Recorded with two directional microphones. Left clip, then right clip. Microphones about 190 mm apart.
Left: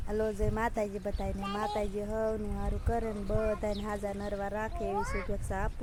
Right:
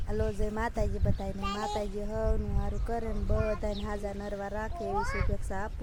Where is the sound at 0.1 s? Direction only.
Centre (ahead or behind).